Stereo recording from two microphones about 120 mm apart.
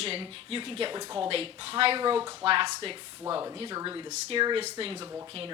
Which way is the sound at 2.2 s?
25° right (ahead or behind).